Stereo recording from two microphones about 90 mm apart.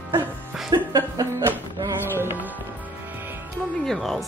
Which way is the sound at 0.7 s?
45° right (ahead or behind).